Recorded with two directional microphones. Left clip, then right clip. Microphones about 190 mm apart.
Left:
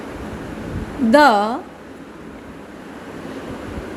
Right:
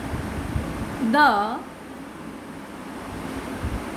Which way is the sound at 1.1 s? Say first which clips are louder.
Left 6 dB; 35° left (ahead or behind).